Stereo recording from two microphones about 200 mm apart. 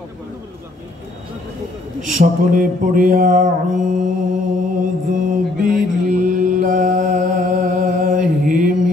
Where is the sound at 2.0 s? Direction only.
40° right (ahead or behind).